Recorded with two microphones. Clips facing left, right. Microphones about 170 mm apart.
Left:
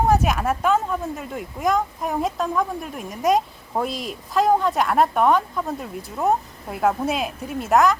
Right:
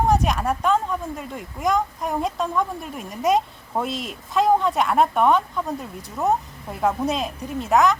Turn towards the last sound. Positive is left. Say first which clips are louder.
# left 1 dB
turn(degrees=0)  # may be behind; listen again after turning